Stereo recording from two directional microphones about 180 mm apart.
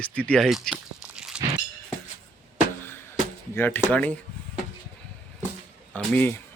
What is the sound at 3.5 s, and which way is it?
Speech, 10° left (ahead or behind).